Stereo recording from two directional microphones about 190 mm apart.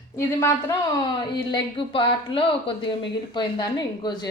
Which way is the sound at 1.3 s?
25° left (ahead or behind).